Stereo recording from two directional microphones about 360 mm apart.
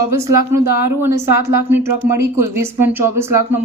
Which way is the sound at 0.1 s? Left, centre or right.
Right.